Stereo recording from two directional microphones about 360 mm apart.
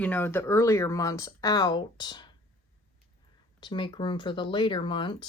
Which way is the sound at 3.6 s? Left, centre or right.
Centre.